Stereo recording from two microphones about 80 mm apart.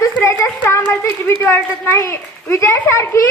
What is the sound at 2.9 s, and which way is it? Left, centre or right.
Speech, left.